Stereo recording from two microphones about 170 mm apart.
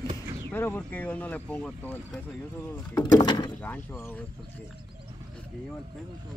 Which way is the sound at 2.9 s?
25° left (ahead or behind).